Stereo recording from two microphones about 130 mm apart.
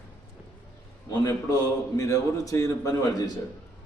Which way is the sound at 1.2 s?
25° left (ahead or behind).